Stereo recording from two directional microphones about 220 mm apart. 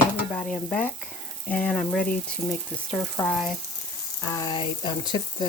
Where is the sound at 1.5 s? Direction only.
5° left (ahead or behind).